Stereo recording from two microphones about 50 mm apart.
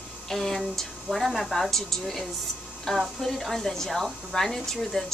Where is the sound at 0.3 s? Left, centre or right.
Centre.